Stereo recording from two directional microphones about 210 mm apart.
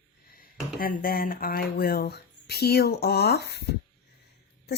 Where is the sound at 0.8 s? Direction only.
40° left (ahead or behind).